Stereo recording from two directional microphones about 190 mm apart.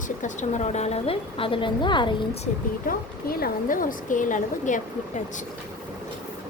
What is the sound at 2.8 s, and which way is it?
Speech, 50° left (ahead or behind).